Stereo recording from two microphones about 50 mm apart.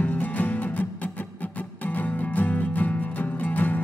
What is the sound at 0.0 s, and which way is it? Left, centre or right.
Music, left.